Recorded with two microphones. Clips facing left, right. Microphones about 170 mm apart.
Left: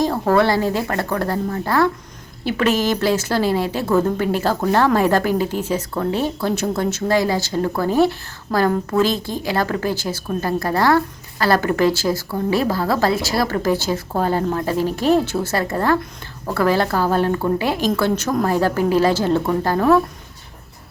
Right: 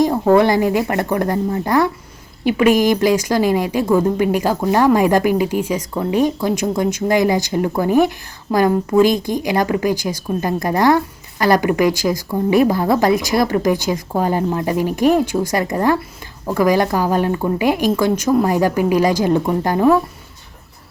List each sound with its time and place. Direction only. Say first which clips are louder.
0.0 s a woman's voice: right 4 dB; 15° right (ahead or behind)